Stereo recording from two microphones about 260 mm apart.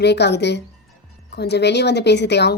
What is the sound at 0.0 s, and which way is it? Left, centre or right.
A woman's voice, left.